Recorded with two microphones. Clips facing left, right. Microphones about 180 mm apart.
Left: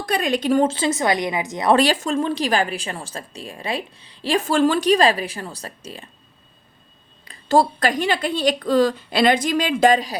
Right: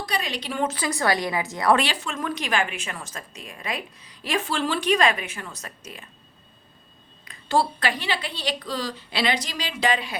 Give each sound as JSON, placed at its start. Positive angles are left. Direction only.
{"t": 0.0, "sound": "a woman's voice", "side_deg": 50}
{"t": 0.6, "sound": "a woman's voice", "side_deg": 25}
{"t": 1.7, "sound": "a woman's voice", "side_deg": 45}
{"t": 2.1, "sound": "a woman's voice", "side_deg": 30}
{"t": 7.3, "sound": "a woman's voice", "side_deg": 40}